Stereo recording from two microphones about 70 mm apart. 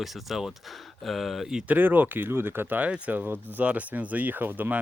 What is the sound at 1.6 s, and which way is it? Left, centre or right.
Speech, right.